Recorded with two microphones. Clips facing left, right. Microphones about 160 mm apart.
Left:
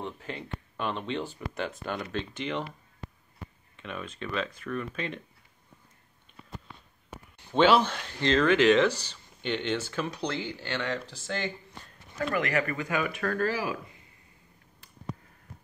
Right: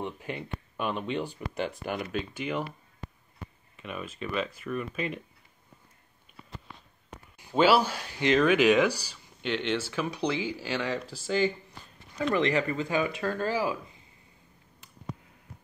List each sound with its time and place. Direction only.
0.0 s speech: 15° right (ahead or behind)
3.7 s speech: 5° right (ahead or behind)
7.3 s speech: 5° right (ahead or behind)
12.2 s speech: 25° right (ahead or behind)